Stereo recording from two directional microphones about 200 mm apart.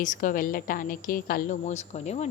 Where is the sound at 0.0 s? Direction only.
40° left (ahead or behind).